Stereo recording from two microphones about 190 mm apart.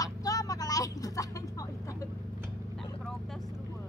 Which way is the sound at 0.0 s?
20° left (ahead or behind).